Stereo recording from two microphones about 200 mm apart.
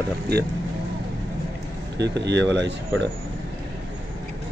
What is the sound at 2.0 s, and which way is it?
Speech, 60° right (ahead or behind).